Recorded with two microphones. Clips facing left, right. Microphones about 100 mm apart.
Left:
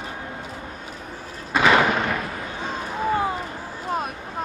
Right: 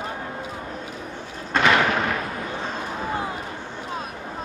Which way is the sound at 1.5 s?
5° left (ahead or behind).